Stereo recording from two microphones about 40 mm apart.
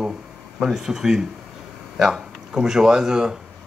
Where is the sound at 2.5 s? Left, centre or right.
Centre.